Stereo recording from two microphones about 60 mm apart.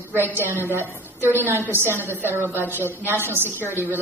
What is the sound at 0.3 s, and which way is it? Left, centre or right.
A woman's voice, right.